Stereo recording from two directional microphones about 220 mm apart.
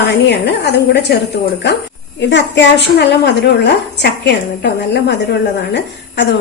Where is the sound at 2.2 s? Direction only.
55° left (ahead or behind).